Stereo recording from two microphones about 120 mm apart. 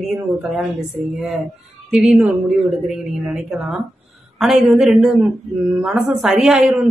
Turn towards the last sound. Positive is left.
turn(degrees=0)  # may be behind; listen again after turning